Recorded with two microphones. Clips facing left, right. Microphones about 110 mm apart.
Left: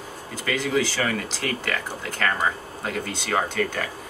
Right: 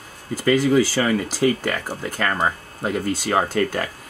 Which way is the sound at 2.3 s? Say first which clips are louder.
Right 3 dB; 40° right (ahead or behind).